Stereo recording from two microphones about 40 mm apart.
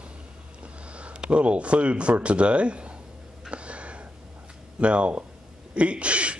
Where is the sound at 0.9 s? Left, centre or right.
Right.